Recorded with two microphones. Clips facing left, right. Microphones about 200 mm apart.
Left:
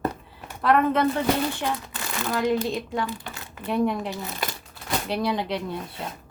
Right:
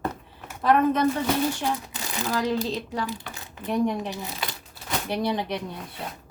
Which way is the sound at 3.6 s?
20° right (ahead or behind).